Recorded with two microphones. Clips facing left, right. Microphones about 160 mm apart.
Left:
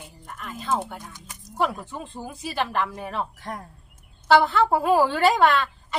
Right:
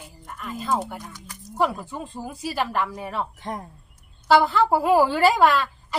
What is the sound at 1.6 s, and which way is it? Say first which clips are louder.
A woman's voice: right 2 dB; centre (ahead or behind).